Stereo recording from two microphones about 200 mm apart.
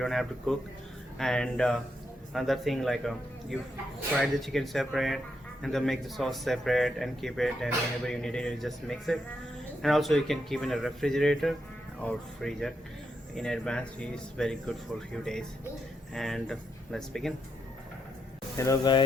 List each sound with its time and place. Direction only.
0.0 s speech: centre (ahead or behind)
4.2 s speech: centre (ahead or behind)
18.5 s speech: 15° left (ahead or behind)